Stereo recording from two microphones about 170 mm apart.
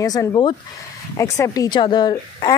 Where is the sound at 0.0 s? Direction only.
20° left (ahead or behind).